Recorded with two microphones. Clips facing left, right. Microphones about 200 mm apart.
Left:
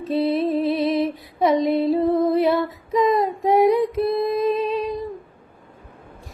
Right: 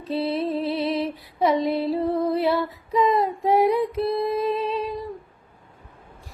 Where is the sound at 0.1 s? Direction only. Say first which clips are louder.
Left 4 dB; 15° left (ahead or behind).